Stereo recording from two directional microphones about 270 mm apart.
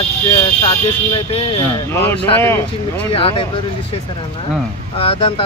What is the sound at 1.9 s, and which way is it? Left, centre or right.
Speech, centre.